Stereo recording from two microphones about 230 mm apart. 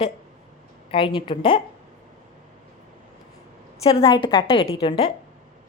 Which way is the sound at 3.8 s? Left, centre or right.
Left.